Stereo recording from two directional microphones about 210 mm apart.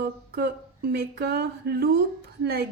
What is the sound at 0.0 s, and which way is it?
A woman's voice, 50° right (ahead or behind).